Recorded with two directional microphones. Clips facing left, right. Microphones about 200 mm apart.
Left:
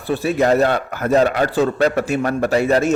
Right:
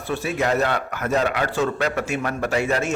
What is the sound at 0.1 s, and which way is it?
A man's voice, 35° left (ahead or behind).